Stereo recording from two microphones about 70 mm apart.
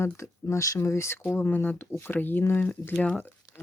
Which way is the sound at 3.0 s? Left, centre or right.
Centre.